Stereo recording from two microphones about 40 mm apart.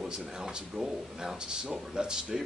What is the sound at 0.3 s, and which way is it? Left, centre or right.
Speech, centre.